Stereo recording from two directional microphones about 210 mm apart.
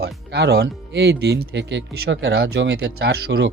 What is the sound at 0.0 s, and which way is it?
Speech, 50° right (ahead or behind).